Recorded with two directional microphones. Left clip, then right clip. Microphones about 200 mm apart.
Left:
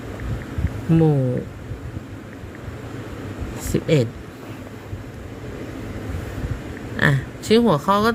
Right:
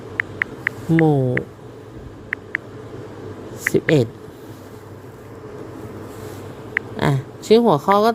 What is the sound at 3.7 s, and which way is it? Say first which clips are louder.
Speech: right 3 dB; 15° right (ahead or behind).